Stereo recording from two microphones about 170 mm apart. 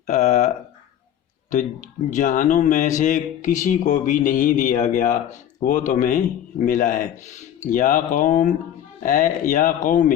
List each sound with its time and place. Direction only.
0.1 s speech: 45° left (ahead or behind)